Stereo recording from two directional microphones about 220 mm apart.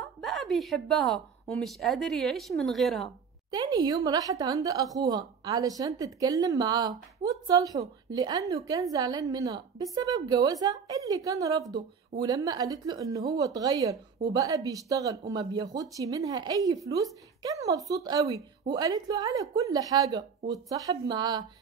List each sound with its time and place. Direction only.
0.0 s a woman's voice: centre (ahead or behind)
3.5 s speech: 20° right (ahead or behind)